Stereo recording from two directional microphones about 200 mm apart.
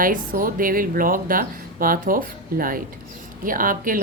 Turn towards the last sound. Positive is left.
turn(degrees=-45)  # may be behind; listen again after turning